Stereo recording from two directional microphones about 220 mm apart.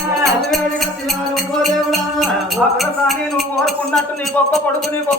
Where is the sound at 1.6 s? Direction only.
Centre (ahead or behind).